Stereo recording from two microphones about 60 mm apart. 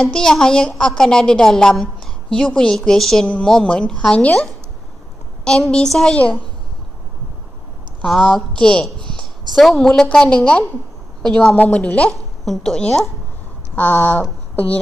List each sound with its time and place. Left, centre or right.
0.0 s a woman's voice: centre
5.7 s a woman's voice: centre
8.2 s a woman's voice: centre
9.0 s a sound: centre
10.1 s a woman's voice: centre
11.5 s a woman's voice: left
13.7 s speech: left